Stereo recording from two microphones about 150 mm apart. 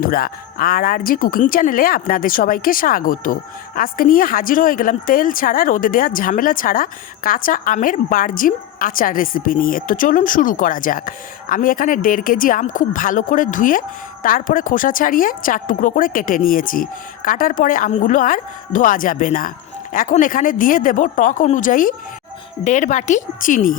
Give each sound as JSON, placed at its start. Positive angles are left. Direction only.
{"t": 0.0, "sound": "a woman's voice", "side_deg": 70}
{"t": 22.6, "sound": "a woman's voice", "side_deg": 55}